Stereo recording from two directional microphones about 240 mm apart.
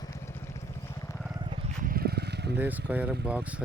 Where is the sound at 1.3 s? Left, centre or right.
Centre.